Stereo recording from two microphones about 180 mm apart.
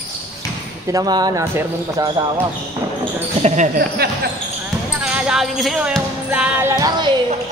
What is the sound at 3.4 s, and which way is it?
Speech, 40° right (ahead or behind).